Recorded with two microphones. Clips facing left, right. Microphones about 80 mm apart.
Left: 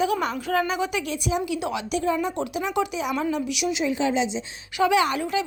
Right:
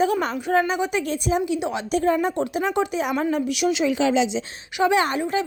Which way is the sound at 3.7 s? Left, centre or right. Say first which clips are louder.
Right 3 dB; right.